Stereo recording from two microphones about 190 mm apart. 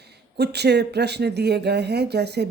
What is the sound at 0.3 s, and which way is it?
Speech, 60° right (ahead or behind).